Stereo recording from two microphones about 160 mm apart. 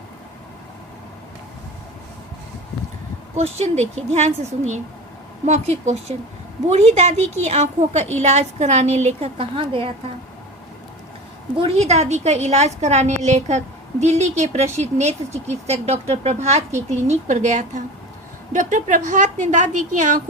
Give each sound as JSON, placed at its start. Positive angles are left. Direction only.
{"t": 3.3, "sound": "speech", "side_deg": -40}
{"t": 11.5, "sound": "speech", "side_deg": -40}